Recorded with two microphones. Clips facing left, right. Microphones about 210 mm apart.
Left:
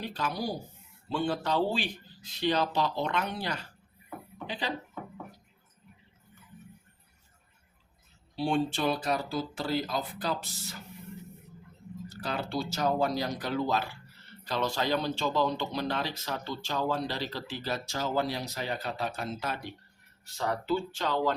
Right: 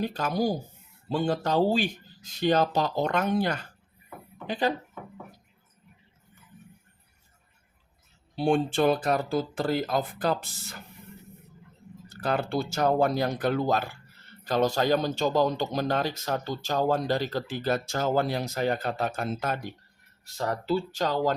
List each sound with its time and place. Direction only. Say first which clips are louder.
0.0 s speech: right 7 dB; 45° right (ahead or behind)
8.4 s speech: right 5 dB; 50° right (ahead or behind)
12.0 s speech: right 6 dB; 55° right (ahead or behind)